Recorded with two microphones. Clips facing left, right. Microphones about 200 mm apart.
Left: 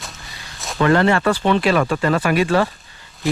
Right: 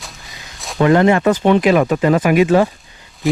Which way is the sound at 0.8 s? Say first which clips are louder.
Right 4 dB; 15° right (ahead or behind).